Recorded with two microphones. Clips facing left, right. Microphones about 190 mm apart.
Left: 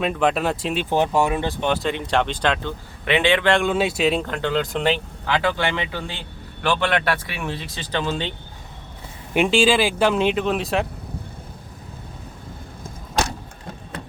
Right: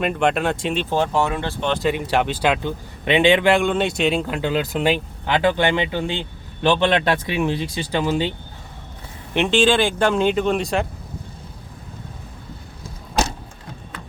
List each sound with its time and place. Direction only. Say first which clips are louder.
0.0 s speech: right 1 dB; centre (ahead or behind)
0.9 s speech: left 2 dB; 15° left (ahead or behind)
1.8 s speech: right 2 dB; 5° right (ahead or behind)
3.5 s speech: right 1 dB; centre (ahead or behind)
9.3 s speech: even; 10° left (ahead or behind)